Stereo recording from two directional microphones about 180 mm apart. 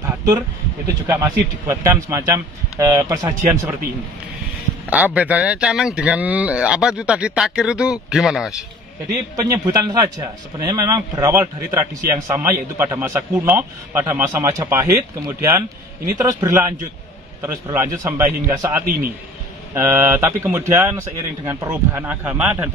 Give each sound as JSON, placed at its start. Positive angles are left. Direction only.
{"t": 0.0, "sound": "a sound", "side_deg": -15}
{"t": 1.0, "sound": "a man's voice", "side_deg": -15}
{"t": 4.8, "sound": "speech", "side_deg": -10}
{"t": 9.4, "sound": "a man's voice", "side_deg": -20}